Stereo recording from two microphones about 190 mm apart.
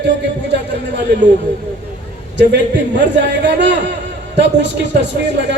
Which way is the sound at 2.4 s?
65° right (ahead or behind).